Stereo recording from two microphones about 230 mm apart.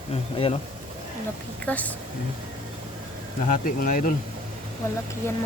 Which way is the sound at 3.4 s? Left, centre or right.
Left.